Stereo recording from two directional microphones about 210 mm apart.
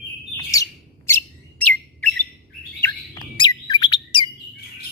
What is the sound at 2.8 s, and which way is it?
Bird, 20° left (ahead or behind).